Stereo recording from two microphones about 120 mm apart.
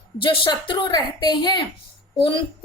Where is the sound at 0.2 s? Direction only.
45° left (ahead or behind).